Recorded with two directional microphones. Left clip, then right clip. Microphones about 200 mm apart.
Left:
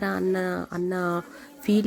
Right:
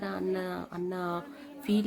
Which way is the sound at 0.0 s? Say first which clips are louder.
Left 7 dB; 35° left (ahead or behind).